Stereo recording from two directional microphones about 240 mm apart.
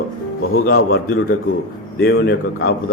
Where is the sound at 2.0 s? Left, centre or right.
Left.